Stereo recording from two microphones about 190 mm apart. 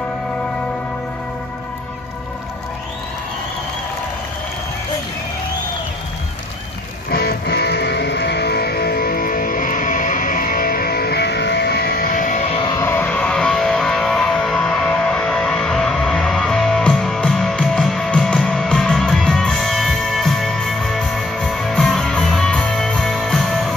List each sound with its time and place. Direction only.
7.1 s music: 55° left (ahead or behind)
12.5 s music: 20° left (ahead or behind); by 23.7 s centre (ahead or behind)